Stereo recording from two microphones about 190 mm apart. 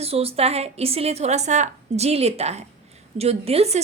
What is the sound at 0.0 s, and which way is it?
A woman's voice, 30° right (ahead or behind).